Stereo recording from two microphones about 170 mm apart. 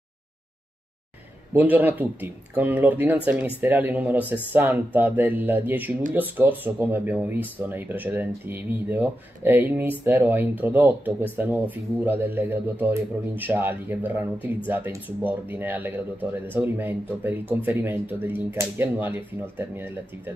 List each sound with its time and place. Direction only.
1.5 s speech: 10° right (ahead or behind)